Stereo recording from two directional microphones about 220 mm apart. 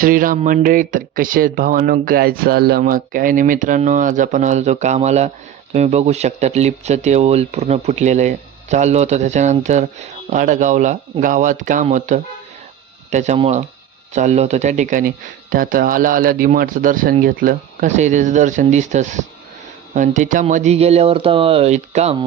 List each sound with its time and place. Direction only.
0.0 s speech: 40° right (ahead or behind)